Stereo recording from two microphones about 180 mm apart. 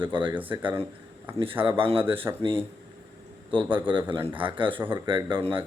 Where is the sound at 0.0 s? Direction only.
25° right (ahead or behind).